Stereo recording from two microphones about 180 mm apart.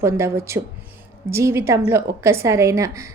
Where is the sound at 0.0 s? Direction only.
15° right (ahead or behind).